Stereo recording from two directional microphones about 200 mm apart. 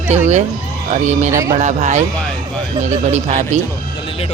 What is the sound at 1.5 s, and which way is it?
A woman's voice, 35° right (ahead or behind).